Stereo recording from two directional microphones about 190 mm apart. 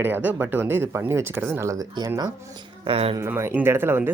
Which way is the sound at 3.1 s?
15° right (ahead or behind).